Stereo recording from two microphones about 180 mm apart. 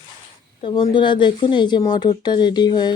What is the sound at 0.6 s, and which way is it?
Speech, 25° left (ahead or behind).